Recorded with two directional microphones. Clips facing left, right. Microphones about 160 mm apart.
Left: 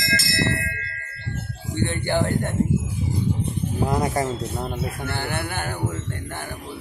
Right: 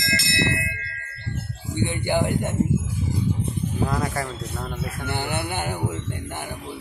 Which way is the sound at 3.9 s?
20° left (ahead or behind).